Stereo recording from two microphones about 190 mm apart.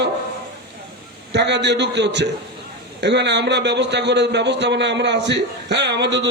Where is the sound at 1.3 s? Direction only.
65° right (ahead or behind).